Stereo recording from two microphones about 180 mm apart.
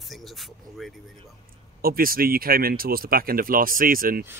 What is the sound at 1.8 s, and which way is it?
Speech, 55° right (ahead or behind).